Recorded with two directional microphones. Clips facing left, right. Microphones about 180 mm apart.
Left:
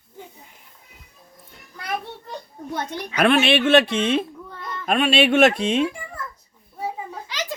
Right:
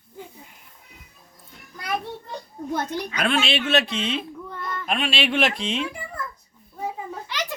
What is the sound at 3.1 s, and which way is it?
Speech, 60° left (ahead or behind).